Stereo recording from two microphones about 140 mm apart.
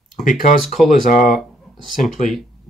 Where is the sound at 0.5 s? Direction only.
Centre (ahead or behind).